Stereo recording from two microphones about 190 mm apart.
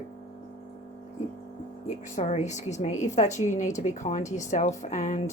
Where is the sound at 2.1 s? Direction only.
40° left (ahead or behind).